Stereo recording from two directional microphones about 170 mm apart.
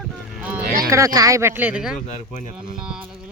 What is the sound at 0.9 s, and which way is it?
Speech, 20° right (ahead or behind).